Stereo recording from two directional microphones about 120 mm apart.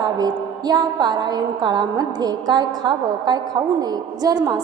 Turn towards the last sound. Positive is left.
turn(degrees=-35)  # may be behind; listen again after turning